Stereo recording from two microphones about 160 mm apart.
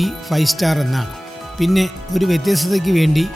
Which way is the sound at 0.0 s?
Centre (ahead or behind).